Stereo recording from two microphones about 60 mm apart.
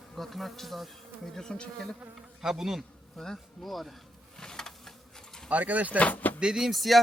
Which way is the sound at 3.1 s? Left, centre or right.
Centre.